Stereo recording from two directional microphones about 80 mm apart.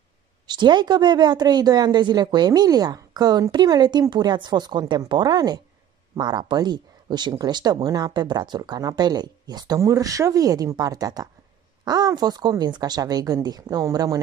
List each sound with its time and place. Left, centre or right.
0.5 s speech: right
9.8 s speech: right